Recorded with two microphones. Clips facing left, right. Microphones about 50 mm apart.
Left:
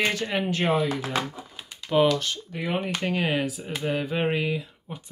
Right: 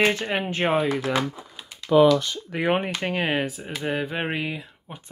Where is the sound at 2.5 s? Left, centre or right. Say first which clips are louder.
Right 6 dB; right.